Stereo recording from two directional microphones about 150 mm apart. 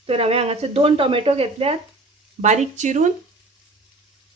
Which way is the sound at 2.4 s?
50° right (ahead or behind).